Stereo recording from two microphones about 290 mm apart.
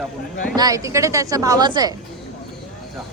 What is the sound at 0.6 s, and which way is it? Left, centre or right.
A woman's voice, centre.